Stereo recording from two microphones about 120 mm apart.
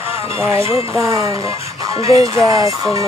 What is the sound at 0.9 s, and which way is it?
Speech, 25° right (ahead or behind).